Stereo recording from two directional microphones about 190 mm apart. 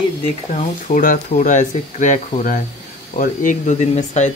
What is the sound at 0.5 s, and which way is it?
Speech, 40° left (ahead or behind).